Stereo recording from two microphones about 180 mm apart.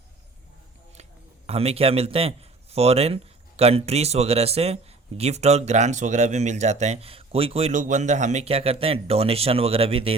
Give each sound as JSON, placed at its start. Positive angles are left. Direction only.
{"t": 1.5, "sound": "a man's voice", "side_deg": -35}